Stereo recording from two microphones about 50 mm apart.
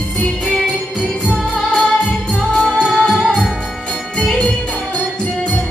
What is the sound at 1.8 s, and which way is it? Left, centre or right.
Music, left.